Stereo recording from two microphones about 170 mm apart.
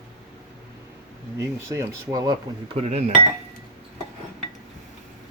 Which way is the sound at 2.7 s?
35° right (ahead or behind).